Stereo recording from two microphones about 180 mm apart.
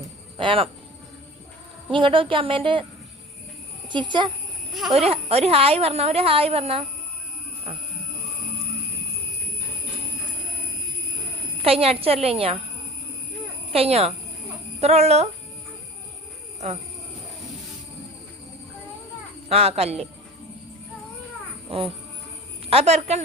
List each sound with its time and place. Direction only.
0.3 s a woman's voice: 30° right (ahead or behind)
1.9 s speech: 30° right (ahead or behind)
3.8 s a woman's voice: 25° right (ahead or behind)
11.6 s a woman's voice: 35° right (ahead or behind)
13.7 s a woman's voice: 35° right (ahead or behind)
19.5 s a woman's voice: 35° right (ahead or behind)
21.7 s a woman's voice: 30° right (ahead or behind)